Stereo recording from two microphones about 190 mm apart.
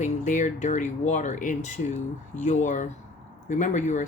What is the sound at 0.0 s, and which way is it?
Speech, 40° left (ahead or behind).